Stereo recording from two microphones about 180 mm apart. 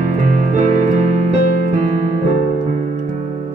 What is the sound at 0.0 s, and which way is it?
Music, 45° right (ahead or behind).